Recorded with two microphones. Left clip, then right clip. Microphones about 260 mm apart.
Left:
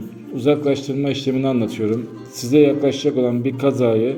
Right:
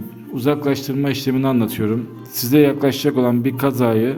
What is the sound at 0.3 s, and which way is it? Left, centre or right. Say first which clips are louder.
A man's voice: left 2 dB; right.